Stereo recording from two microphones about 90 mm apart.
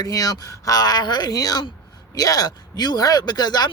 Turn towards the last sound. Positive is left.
turn(degrees=50)  # may be behind; listen again after turning